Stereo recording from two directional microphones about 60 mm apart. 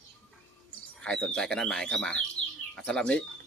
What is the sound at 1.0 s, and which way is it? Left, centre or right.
Speech, centre.